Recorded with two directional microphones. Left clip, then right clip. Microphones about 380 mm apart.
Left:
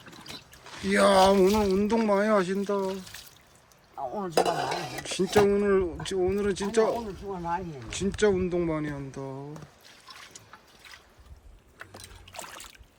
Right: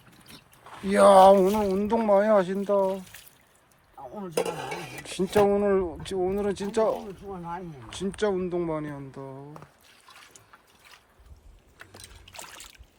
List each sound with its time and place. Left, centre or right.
0.9 s speech: centre
3.1 s drip: centre
4.1 s speech: centre
5.0 s speech: centre
11.8 s boat: centre